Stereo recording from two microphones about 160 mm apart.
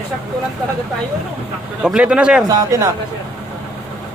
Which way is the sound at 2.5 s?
20° right (ahead or behind).